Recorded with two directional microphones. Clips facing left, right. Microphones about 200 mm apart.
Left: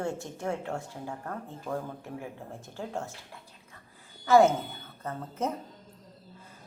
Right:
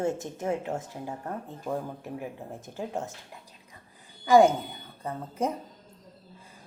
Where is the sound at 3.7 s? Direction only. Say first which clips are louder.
Right 1 dB; 15° right (ahead or behind).